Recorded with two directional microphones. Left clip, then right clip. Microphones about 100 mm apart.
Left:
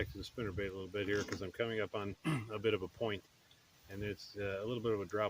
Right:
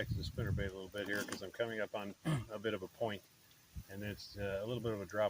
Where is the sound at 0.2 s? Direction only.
90° left.